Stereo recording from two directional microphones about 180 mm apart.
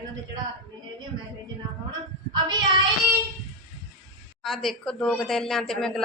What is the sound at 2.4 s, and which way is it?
Child singing, 25° right (ahead or behind).